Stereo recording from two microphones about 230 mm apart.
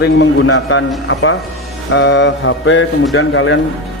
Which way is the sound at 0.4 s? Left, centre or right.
Left.